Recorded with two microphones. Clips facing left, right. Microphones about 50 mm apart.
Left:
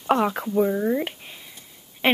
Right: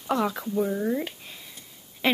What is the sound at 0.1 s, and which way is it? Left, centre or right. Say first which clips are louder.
Female singing: left 3 dB; left.